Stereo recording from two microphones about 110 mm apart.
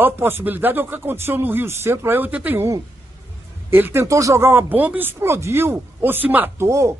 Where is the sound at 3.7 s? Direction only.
20° right (ahead or behind).